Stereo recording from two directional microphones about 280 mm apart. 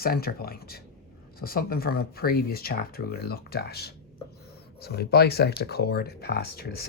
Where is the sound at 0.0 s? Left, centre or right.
Left.